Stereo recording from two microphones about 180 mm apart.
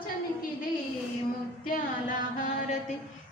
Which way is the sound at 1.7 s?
50° left (ahead or behind).